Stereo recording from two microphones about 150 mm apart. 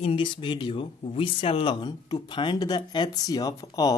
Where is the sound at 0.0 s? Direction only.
35° left (ahead or behind).